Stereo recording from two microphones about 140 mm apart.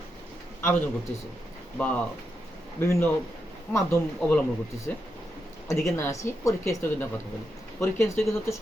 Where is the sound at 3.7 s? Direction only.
20° left (ahead or behind).